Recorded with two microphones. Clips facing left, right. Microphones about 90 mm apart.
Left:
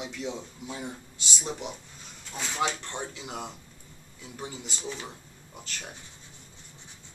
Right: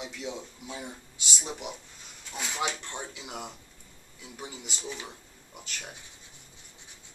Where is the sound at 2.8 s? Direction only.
20° left (ahead or behind).